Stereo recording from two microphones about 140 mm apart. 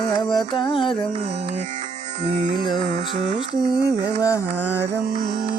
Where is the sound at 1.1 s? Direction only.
50° right (ahead or behind).